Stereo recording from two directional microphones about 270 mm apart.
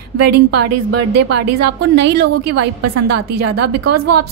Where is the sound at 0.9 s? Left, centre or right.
Right.